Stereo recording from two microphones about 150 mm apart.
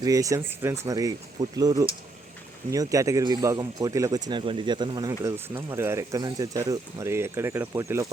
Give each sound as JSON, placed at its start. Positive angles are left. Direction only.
{"t": 0.0, "sound": "speech", "side_deg": -20}